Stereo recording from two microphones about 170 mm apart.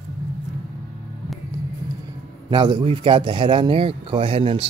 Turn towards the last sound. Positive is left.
turn(degrees=-35)  # may be behind; listen again after turning